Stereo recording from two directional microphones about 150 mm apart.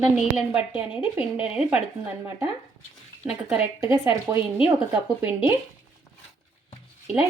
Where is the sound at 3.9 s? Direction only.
20° right (ahead or behind).